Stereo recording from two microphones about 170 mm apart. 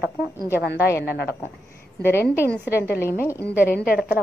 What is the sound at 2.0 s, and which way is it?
Speech, 15° left (ahead or behind).